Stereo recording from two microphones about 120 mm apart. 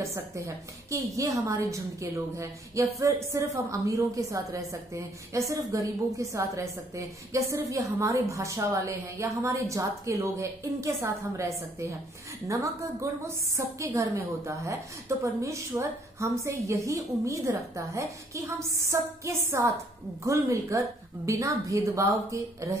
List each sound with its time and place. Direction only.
0.8 s a woman's voice: 25° right (ahead or behind)